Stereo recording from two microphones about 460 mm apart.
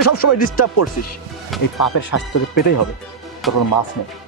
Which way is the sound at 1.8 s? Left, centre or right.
Left.